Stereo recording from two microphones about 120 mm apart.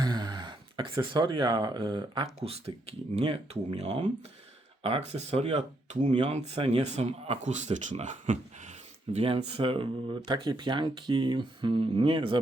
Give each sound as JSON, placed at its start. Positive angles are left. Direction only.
{"t": 0.0, "sound": "speech", "side_deg": -35}
{"t": 2.4, "sound": "speech", "side_deg": -55}
{"t": 9.1, "sound": "speech", "side_deg": -55}